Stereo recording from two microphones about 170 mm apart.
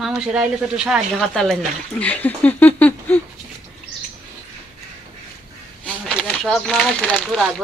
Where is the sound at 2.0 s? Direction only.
10° left (ahead or behind).